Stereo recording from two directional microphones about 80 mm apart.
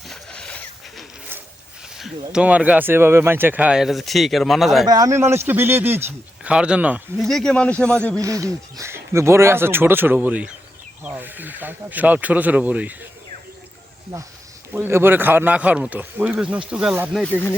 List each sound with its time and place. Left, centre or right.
0.1 s wild animals: centre
2.3 s a man's voice: centre
3.7 s speech: centre
4.9 s speech: right
5.1 s a man's voice: right
6.4 s speech: centre
7.2 s speech: centre
8.2 s speech: right; by 13.0 s centre
14.7 s a man's voice: right
16.3 s speech: centre